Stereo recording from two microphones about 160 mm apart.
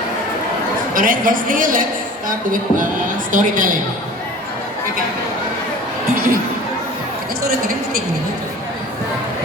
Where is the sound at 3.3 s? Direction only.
55° right (ahead or behind).